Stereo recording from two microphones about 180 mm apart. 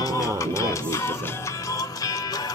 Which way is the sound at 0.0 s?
20° left (ahead or behind).